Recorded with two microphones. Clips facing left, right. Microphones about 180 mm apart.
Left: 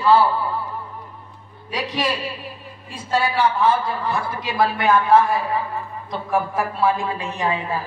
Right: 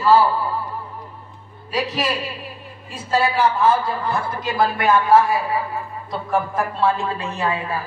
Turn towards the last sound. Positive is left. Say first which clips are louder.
# even
turn(degrees=15)  # may be behind; listen again after turning